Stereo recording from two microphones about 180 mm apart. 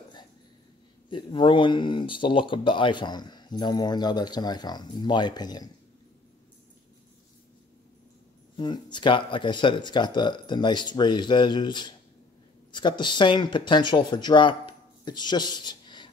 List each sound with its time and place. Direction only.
1.1 s speech: 25° left (ahead or behind)
8.5 s speech: 25° left (ahead or behind)